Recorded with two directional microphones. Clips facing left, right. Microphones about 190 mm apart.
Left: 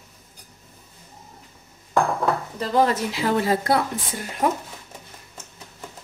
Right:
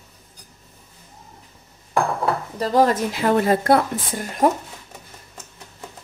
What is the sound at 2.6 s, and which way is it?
Speech, 45° right (ahead or behind).